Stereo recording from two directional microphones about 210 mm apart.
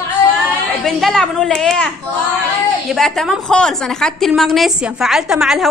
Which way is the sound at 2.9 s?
Centre (ahead or behind).